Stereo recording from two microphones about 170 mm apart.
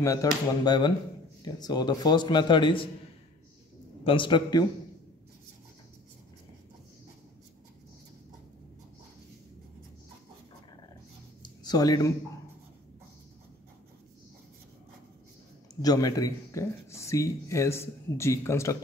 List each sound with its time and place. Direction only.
0.0 s a man's voice: 20° left (ahead or behind)
4.0 s a man's voice: 30° left (ahead or behind)
11.4 s a sound: 25° left (ahead or behind)
15.7 s speech: 20° left (ahead or behind)